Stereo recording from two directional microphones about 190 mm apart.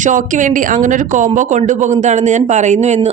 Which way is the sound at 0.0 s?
40° right (ahead or behind).